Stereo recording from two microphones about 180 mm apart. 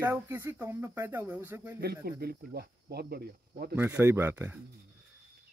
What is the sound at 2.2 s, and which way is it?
Speech, 60° right (ahead or behind).